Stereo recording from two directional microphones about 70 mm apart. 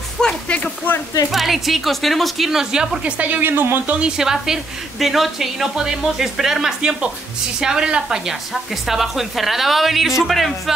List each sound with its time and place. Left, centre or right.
0.2 s music: centre
1.3 s a woman's voice: centre; by 3.9 s right
4.0 s a woman's voice: centre